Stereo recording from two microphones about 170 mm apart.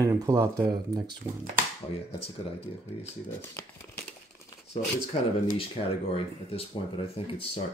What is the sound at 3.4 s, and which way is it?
Speech, 10° left (ahead or behind).